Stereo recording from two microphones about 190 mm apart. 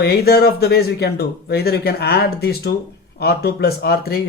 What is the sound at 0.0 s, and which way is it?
Speech, 55° left (ahead or behind).